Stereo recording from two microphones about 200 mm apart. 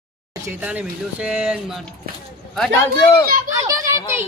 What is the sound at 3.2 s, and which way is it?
Speech, 45° right (ahead or behind).